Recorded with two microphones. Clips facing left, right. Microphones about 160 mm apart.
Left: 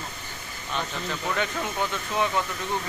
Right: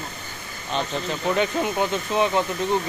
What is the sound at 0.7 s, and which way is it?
Speech, 20° right (ahead or behind).